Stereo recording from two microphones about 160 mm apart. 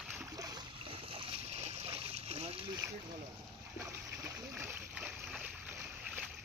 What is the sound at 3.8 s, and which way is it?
Splash, 20° right (ahead or behind).